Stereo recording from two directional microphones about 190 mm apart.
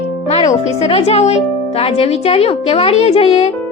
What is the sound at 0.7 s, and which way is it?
A woman's voice, 35° left (ahead or behind).